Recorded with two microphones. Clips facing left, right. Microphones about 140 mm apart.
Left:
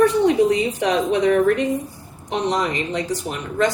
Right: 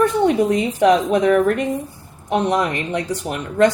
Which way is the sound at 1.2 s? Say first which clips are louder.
Right 1 dB; 55° right (ahead or behind).